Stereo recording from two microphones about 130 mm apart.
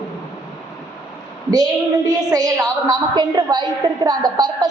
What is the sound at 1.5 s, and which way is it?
A woman's voice, 30° right (ahead or behind).